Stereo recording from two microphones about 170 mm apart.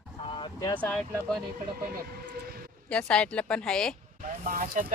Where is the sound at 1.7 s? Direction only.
65° right (ahead or behind).